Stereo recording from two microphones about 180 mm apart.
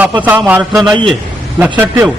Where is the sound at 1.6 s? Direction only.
10° right (ahead or behind).